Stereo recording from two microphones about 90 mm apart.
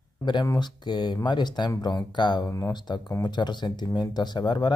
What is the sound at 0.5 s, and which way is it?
A man's voice, 55° left (ahead or behind).